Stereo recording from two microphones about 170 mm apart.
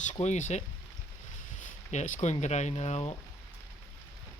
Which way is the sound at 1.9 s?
45° left (ahead or behind).